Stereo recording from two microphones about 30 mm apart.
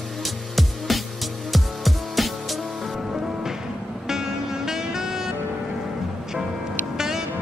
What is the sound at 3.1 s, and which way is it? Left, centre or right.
Music, right.